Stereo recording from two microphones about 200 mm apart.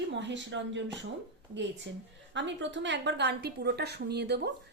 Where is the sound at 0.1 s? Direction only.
60° right (ahead or behind).